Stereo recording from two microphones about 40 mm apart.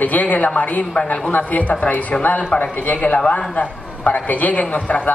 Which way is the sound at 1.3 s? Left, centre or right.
Left.